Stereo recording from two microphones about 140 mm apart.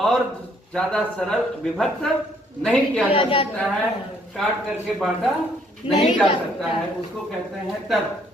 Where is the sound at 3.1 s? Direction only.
40° left (ahead or behind).